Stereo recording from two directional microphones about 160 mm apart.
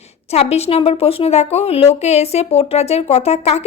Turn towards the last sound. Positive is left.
turn(degrees=40)  # may be behind; listen again after turning